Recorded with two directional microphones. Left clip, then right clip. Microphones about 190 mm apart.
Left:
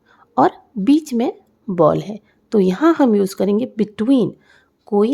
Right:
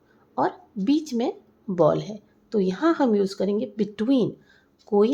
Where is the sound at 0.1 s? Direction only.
45° left (ahead or behind).